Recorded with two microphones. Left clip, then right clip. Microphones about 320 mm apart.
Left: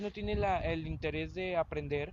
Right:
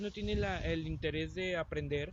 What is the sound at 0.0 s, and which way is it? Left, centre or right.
Speech, centre.